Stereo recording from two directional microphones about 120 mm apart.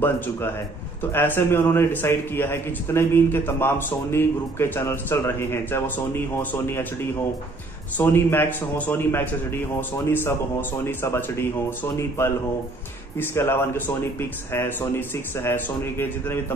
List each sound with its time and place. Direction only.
1.1 s a man's voice: 20° left (ahead or behind)
8.0 s a man's voice: 20° left (ahead or behind)
13.2 s a man's voice: 20° left (ahead or behind)